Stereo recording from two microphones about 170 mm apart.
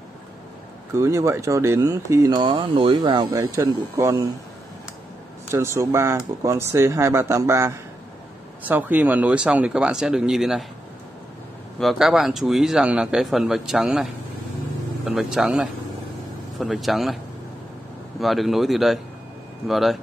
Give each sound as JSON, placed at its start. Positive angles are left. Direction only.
{"t": 0.9, "sound": "speech", "side_deg": -15}
{"t": 3.3, "sound": "speech", "side_deg": -15}
{"t": 5.5, "sound": "speech", "side_deg": -15}
{"t": 11.8, "sound": "a man's voice", "side_deg": 0}
{"t": 15.0, "sound": "a man's voice", "side_deg": -5}
{"t": 18.2, "sound": "a man's voice", "side_deg": 0}